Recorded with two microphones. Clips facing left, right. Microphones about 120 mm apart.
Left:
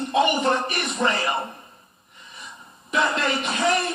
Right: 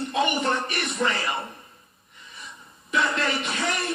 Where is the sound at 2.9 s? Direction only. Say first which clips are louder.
Left 2 dB; 20° left (ahead or behind).